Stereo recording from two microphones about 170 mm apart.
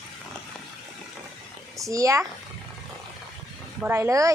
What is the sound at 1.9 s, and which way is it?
Speech, 20° right (ahead or behind).